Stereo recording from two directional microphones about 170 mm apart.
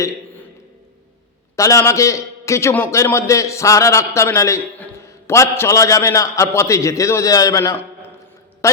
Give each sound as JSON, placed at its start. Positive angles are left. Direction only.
{"t": 1.5, "sound": "a man's voice", "side_deg": 20}